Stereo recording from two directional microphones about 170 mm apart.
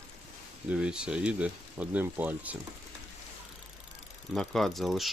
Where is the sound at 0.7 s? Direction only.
5° right (ahead or behind).